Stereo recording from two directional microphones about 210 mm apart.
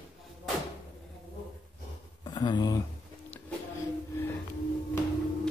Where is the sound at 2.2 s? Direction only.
20° left (ahead or behind).